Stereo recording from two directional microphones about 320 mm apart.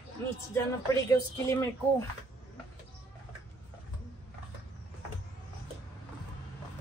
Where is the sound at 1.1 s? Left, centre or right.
Centre.